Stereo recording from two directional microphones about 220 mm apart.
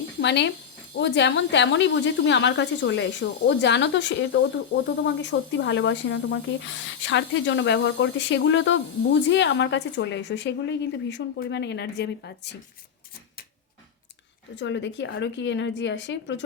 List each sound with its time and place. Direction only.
0.2 s a woman's voice: 50° left (ahead or behind)
14.5 s a woman's voice: 55° left (ahead or behind)